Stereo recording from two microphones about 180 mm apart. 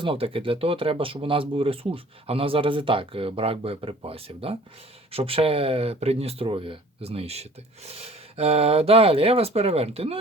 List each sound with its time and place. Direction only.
0.0 s speech: 30° right (ahead or behind)